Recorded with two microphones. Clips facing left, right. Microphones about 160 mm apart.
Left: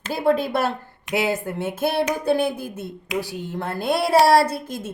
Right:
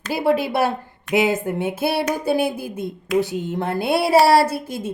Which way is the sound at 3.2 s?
20° right (ahead or behind).